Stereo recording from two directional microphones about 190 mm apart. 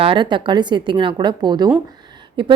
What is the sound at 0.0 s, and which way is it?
A woman's voice, 25° right (ahead or behind).